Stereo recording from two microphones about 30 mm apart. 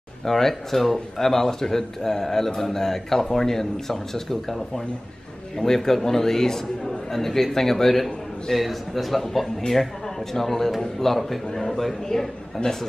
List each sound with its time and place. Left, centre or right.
0.2 s a man's voice: centre
12.6 s a man's voice: left